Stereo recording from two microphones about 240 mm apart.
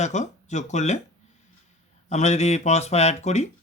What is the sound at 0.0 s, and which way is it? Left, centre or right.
Speech, left.